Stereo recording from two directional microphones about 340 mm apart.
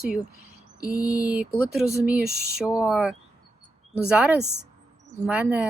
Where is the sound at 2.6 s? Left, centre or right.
Centre.